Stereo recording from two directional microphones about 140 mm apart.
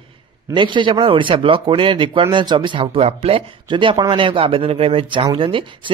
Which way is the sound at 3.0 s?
50° right (ahead or behind).